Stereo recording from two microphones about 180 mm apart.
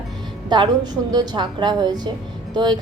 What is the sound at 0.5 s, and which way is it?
A woman's voice, 25° right (ahead or behind).